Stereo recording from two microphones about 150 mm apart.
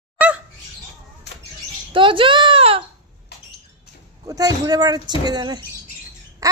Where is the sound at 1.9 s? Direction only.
35° right (ahead or behind).